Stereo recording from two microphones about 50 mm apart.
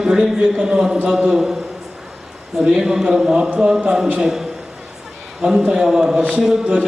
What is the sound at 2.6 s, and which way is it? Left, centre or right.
A man's voice, centre.